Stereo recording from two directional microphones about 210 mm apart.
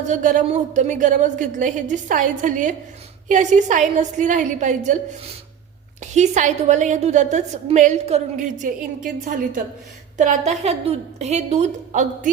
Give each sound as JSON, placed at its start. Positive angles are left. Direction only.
{"t": 0.1, "sound": "a woman's voice", "side_deg": -35}
{"t": 10.2, "sound": "a woman's voice", "side_deg": -35}